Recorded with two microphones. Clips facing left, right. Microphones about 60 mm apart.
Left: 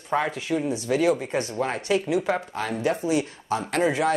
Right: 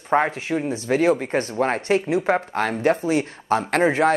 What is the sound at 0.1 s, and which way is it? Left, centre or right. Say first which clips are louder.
Speech: right 4 dB; right.